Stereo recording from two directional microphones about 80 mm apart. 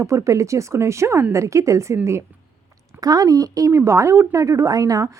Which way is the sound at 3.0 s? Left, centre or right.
Right.